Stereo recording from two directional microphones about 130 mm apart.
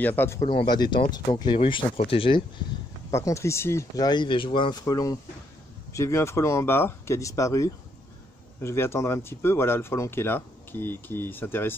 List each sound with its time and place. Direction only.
0.0 s speech: 15° left (ahead or behind)
0.4 s speech: 45° left (ahead or behind)
0.7 s speech: 35° left (ahead or behind)
3.1 s speech: 20° left (ahead or behind)